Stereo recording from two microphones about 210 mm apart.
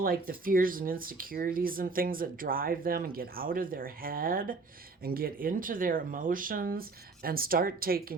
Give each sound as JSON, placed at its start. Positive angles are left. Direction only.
{"t": 0.0, "sound": "speech", "side_deg": -45}